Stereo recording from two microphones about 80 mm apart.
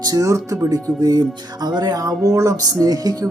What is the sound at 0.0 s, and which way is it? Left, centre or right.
Speech, right.